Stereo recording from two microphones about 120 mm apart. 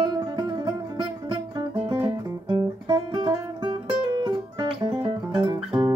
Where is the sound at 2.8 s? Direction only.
35° right (ahead or behind).